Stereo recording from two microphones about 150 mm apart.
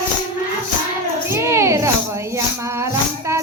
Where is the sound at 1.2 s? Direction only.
20° right (ahead or behind).